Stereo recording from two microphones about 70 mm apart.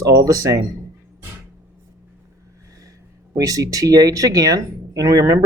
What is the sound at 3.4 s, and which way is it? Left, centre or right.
Speech, right.